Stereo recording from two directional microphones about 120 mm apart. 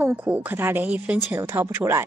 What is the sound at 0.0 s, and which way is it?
Speech, 15° right (ahead or behind).